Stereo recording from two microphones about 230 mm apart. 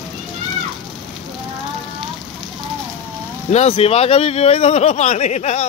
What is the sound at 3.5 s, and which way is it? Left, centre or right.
Speech, left.